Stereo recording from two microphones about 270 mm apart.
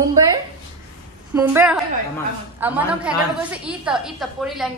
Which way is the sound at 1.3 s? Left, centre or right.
Centre.